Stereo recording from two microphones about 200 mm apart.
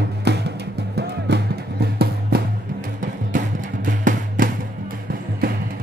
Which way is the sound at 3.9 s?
45° right (ahead or behind).